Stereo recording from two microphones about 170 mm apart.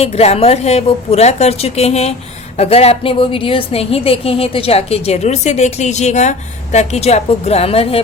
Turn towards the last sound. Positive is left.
turn(degrees=35)  # may be behind; listen again after turning